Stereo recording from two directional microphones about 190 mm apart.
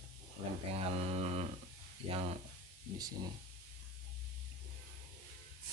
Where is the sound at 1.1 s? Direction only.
35° right (ahead or behind).